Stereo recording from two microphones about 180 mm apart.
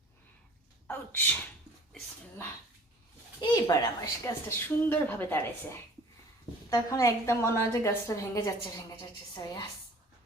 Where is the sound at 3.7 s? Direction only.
20° left (ahead or behind).